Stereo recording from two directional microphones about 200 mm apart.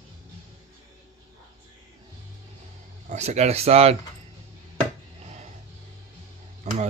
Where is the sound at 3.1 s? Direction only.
35° right (ahead or behind).